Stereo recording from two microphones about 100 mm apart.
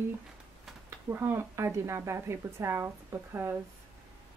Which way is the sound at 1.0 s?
20° right (ahead or behind).